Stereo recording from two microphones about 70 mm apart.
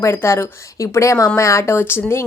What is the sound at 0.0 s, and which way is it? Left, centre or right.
A woman's voice, left.